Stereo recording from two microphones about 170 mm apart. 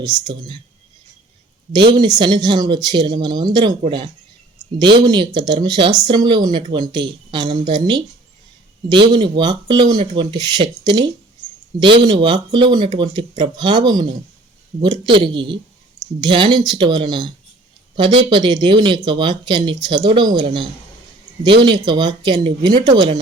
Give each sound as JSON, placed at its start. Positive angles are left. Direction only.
{"t": 0.0, "sound": "speech", "side_deg": -25}
{"t": 1.7, "sound": "speech", "side_deg": -25}